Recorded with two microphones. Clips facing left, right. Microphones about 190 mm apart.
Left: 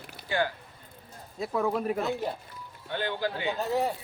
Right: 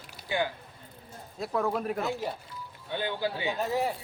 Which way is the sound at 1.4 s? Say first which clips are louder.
Left 1 dB; centre (ahead or behind).